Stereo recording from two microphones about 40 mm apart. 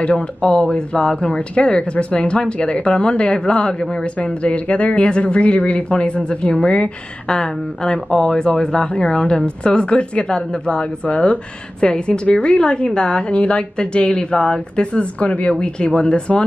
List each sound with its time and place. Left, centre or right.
0.0 s speech: left
12.5 s speech: centre
15.0 s speech: left